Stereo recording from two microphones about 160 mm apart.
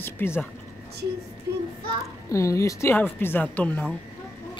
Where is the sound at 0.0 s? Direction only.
15° left (ahead or behind).